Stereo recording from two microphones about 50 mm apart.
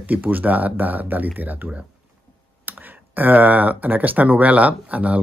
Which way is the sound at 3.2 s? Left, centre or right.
Right.